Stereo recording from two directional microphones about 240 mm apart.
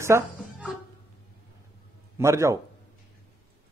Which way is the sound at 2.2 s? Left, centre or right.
Centre.